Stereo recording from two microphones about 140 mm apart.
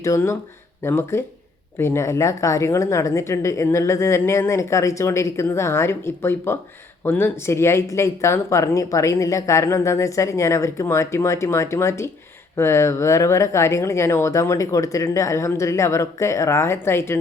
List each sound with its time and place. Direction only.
0.0 s speech: 20° left (ahead or behind)